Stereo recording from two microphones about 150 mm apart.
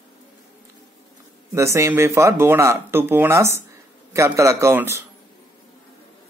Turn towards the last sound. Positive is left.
turn(degrees=-15)  # may be behind; listen again after turning